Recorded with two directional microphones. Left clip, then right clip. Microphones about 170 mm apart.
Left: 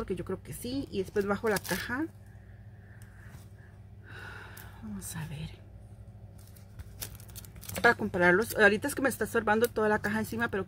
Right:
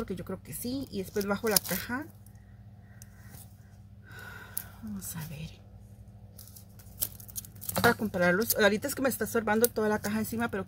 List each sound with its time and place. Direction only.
0.0 s speech: 20° left (ahead or behind)
4.1 s a sound: 20° left (ahead or behind)
7.8 s speech: 30° left (ahead or behind)